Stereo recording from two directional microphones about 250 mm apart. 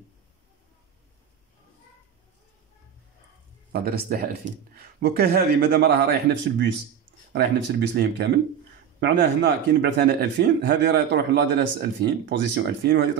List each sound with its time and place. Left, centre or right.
3.7 s speech: right
7.9 s speech: right